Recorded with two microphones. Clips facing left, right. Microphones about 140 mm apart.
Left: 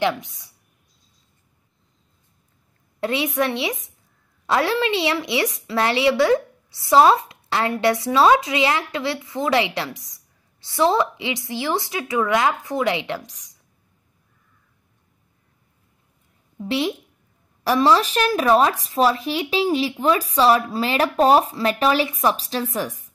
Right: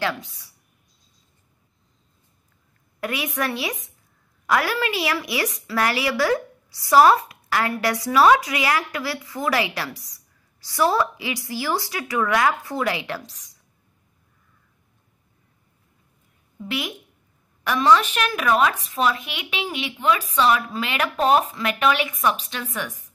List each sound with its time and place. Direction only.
0.0 s a woman's voice: 20° left (ahead or behind)
3.0 s a woman's voice: 25° left (ahead or behind)
16.5 s a woman's voice: 30° left (ahead or behind)